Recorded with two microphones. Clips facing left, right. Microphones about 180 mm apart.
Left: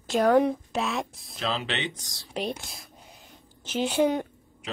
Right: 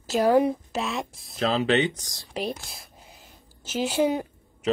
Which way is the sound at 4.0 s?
5° right (ahead or behind).